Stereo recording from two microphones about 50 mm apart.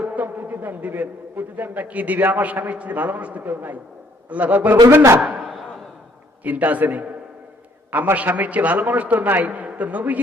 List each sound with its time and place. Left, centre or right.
0.0 s a man's voice: right
4.7 s a man's voice: right
6.4 s a man's voice: right
8.1 s a man's voice: right